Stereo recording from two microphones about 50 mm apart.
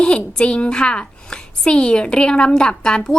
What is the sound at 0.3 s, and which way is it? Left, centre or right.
A woman's voice, left.